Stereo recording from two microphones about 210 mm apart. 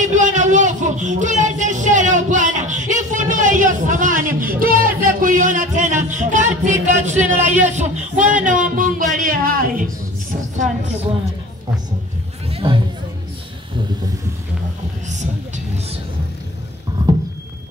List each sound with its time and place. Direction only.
0.0 s a sound: 35° right (ahead or behind)
8.5 s music: 40° right (ahead or behind)
12.4 s music: 25° right (ahead or behind)
15.0 s vehicle: 35° right (ahead or behind)